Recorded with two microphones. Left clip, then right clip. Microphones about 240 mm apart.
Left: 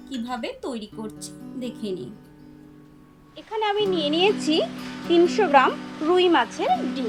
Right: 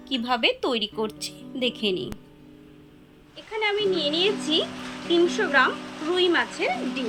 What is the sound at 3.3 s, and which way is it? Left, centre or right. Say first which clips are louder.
Speech: left 2 dB; left.